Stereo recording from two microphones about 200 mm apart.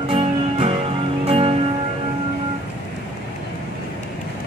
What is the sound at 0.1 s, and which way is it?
Music, 30° right (ahead or behind).